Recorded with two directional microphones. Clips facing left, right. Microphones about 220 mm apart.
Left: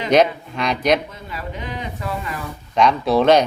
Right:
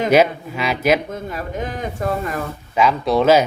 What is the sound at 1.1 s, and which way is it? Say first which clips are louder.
Speech: right 5 dB; 50° right (ahead or behind).